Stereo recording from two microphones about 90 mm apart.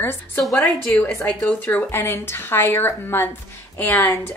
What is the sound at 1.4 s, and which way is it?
A woman's voice, 20° left (ahead or behind).